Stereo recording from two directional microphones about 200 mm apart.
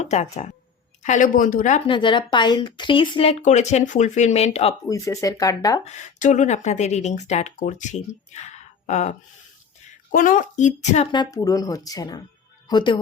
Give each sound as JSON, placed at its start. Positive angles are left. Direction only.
{"t": 0.0, "sound": "speech", "side_deg": 35}
{"t": 1.9, "sound": "speech", "side_deg": 25}
{"t": 4.9, "sound": "speech", "side_deg": 15}
{"t": 5.8, "sound": "a woman's voice", "side_deg": 35}